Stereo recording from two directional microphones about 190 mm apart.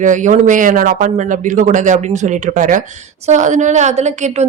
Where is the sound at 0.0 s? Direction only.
40° right (ahead or behind).